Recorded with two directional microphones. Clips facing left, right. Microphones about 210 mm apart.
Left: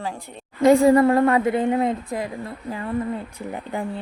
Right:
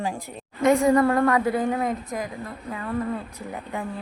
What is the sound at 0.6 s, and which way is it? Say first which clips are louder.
A woman's voice: left 4 dB; 30° left (ahead or behind).